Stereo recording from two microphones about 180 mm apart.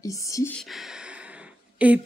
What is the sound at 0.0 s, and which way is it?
Speech, 20° left (ahead or behind).